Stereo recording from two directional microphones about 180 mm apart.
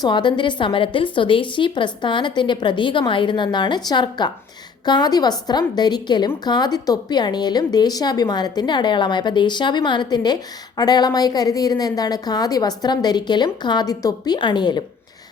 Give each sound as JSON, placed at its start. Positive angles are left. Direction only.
{"t": 0.0, "sound": "a woman's voice", "side_deg": 25}